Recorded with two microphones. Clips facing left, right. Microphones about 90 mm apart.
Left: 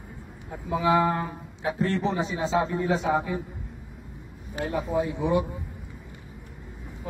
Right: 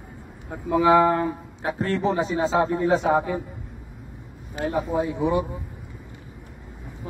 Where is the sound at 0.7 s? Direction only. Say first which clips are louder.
Right 5 dB; 50° right (ahead or behind).